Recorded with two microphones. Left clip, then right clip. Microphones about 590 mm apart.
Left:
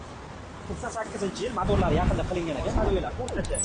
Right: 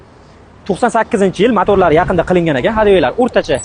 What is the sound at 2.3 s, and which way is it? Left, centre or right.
Speech, right.